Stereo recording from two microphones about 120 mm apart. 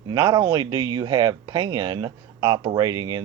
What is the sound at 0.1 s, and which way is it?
Speech, 30° right (ahead or behind).